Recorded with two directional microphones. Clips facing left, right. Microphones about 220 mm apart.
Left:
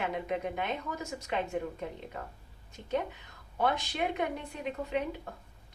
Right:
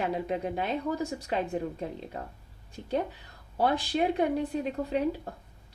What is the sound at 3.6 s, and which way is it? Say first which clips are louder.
A woman's voice: right 4 dB; 30° right (ahead or behind).